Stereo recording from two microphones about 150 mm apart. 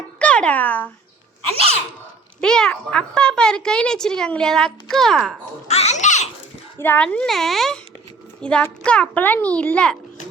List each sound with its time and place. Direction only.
0.2 s babbling: 10° left (ahead or behind)
2.4 s a child's voice: 5° left (ahead or behind)
5.6 s a child's voice: 45° left (ahead or behind)
6.7 s a child's voice: 10° left (ahead or behind)